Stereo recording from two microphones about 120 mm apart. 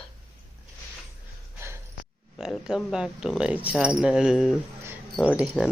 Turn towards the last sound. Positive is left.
turn(degrees=-10)  # may be behind; listen again after turning